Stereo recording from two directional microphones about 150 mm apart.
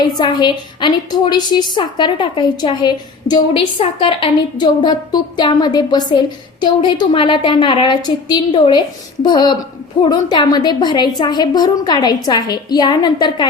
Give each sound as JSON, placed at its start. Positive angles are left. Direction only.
{"t": 0.0, "sound": "a woman's voice", "side_deg": 30}